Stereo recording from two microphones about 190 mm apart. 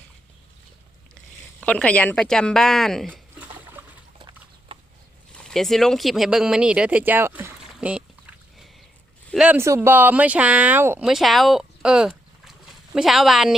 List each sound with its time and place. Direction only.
1.6 s speech: 5° left (ahead or behind)
4.2 s clip-clop: 25° right (ahead or behind)
5.3 s speech: 5° left (ahead or behind)
9.3 s speech: 5° right (ahead or behind)